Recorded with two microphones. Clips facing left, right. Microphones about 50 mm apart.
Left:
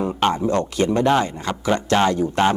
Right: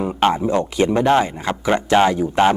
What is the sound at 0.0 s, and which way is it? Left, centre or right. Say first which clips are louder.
Speech: right 2 dB; centre.